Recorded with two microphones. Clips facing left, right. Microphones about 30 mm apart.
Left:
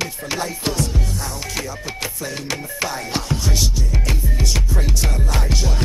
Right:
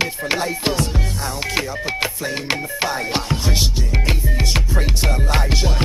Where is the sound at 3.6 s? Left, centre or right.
Right.